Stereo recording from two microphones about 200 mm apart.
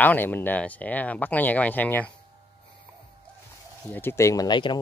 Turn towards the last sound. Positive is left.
turn(degrees=20)  # may be behind; listen again after turning